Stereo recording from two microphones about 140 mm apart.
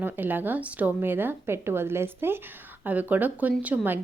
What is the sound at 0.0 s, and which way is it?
A woman's voice, 15° right (ahead or behind).